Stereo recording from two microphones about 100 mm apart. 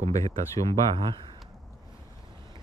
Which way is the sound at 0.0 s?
35° left (ahead or behind).